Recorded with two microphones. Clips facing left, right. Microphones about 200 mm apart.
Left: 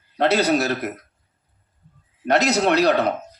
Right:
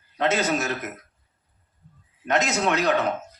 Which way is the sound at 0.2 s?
35° left (ahead or behind).